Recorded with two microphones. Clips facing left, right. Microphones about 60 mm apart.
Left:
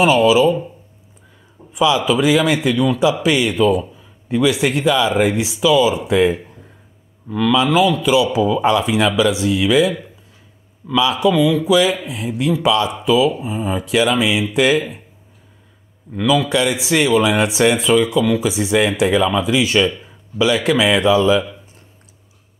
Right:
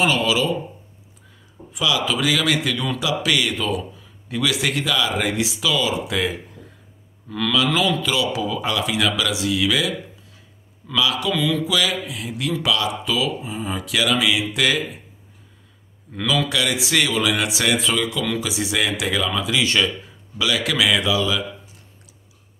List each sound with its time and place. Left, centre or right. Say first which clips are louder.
0.0 s speech: left 7 dB; centre
1.7 s speech: left 7 dB; left
7.2 s speech: left 5 dB; centre
11.0 s speech: left 6 dB; left
11.3 s speech: left 7 dB; centre
11.6 s speech: left 7 dB; left
16.2 s speech: left 6 dB; centre
16.4 s speech: left 5 dB; left
20.3 s speech: left 6 dB; left